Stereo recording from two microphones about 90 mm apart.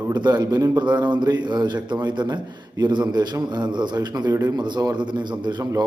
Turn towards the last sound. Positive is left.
turn(degrees=-55)  # may be behind; listen again after turning